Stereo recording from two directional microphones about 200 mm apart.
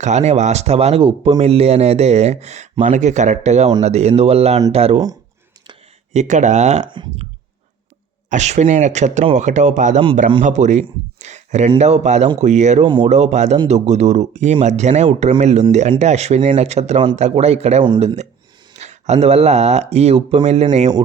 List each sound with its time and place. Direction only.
0.0 s speech: 35° right (ahead or behind)
6.1 s speech: 35° right (ahead or behind)
6.8 s speech: 25° right (ahead or behind)
8.3 s speech: 35° right (ahead or behind)
18.8 s speech: 35° right (ahead or behind)